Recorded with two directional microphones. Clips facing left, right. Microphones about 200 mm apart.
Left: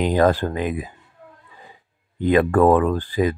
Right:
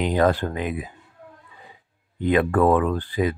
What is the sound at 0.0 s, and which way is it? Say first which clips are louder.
Speech: left 3 dB; 45° left (ahead or behind).